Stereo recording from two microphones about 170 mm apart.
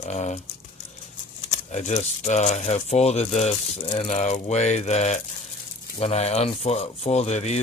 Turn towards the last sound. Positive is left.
turn(degrees=40)  # may be behind; listen again after turning